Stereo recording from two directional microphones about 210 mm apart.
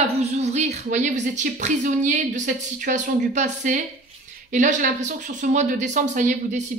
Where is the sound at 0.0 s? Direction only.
30° right (ahead or behind).